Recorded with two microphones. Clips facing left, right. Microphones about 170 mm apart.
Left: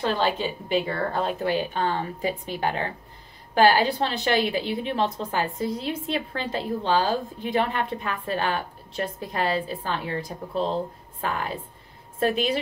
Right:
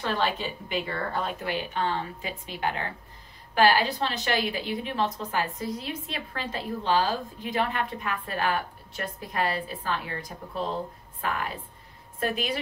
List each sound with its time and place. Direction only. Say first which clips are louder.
0.0 s a woman's voice: left 4 dB; 30° left (ahead or behind)